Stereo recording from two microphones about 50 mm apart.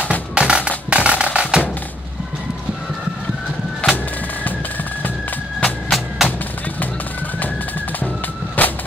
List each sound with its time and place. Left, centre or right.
0.0 s music: right
3.8 s music: left
5.9 s music: centre
8.6 s vehicle: left